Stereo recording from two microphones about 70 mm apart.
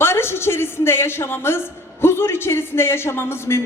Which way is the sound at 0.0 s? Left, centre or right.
Left.